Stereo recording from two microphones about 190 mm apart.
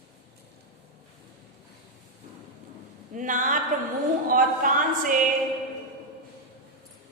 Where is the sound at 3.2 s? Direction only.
45° right (ahead or behind).